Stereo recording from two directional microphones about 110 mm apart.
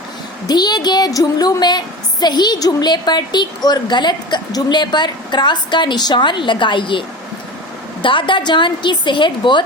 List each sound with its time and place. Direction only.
0.4 s a woman's voice: 40° left (ahead or behind)
8.0 s a woman's voice: 50° left (ahead or behind)